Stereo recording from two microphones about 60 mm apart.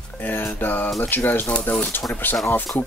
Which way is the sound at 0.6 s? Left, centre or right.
Left.